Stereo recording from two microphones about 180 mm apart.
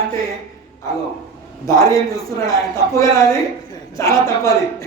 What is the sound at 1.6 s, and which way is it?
A man's voice, 20° left (ahead or behind).